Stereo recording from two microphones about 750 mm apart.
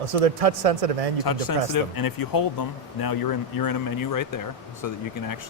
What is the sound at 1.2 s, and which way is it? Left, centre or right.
Speech, left.